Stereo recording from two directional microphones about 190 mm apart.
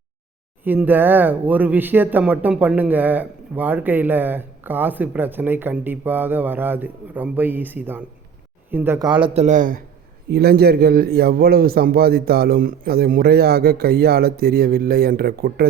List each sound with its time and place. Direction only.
0.6 s a man's voice: 10° right (ahead or behind); by 9.8 s 45° right (ahead or behind)
10.2 s speech: 55° right (ahead or behind)